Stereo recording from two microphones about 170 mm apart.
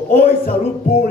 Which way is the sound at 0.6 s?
40° left (ahead or behind).